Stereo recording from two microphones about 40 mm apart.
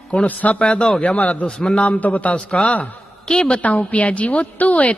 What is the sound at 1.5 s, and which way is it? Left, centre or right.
Speech, left.